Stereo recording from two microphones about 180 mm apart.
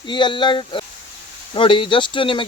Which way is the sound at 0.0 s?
25° left (ahead or behind).